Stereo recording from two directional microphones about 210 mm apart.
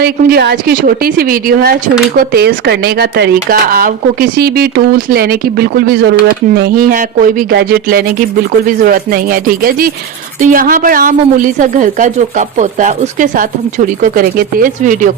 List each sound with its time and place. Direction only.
0.0 s a man's voice: 50° right (ahead or behind)